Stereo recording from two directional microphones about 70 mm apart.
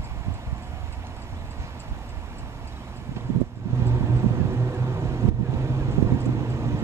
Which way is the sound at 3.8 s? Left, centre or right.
Right.